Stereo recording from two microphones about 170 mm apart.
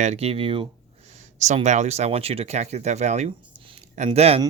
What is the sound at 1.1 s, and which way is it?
Speech, 45° right (ahead or behind).